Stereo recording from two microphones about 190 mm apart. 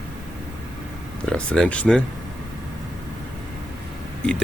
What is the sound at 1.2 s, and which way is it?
Speech, 5° left (ahead or behind).